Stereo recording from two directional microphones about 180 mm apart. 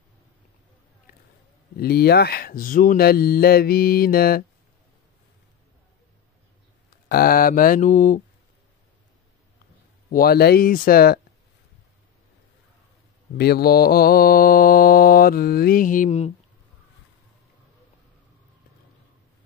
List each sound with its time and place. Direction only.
1.8 s mantra: 60° left (ahead or behind)
7.1 s speech: 55° left (ahead or behind)
10.0 s mantra: 55° left (ahead or behind)
13.4 s mantra: 60° left (ahead or behind); by 16.3 s 40° left (ahead or behind)